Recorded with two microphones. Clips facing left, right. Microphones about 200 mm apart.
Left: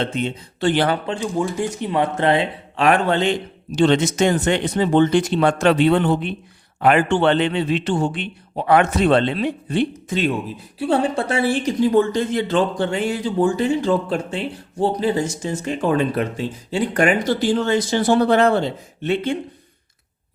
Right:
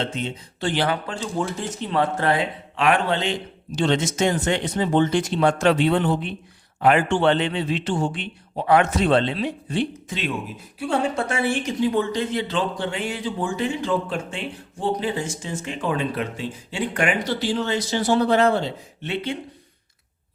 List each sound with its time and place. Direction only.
0.0 s a man's voice: 60° left (ahead or behind)
1.0 s speech: 20° left (ahead or behind)
2.7 s a man's voice: 40° left (ahead or behind); by 10.2 s 60° left (ahead or behind)
10.8 s speech: 30° left (ahead or behind); by 19.4 s 50° left (ahead or behind)